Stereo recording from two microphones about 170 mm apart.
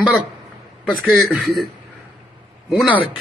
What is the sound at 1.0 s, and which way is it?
Speech, centre (ahead or behind).